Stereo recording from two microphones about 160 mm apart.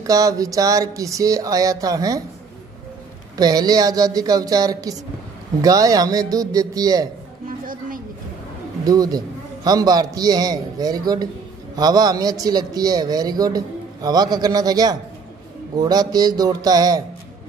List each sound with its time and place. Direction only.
0.0 s speech: 20° right (ahead or behind)
3.3 s speech: 25° right (ahead or behind)
7.4 s music: 60° right (ahead or behind)
8.8 s speech: 25° right (ahead or behind)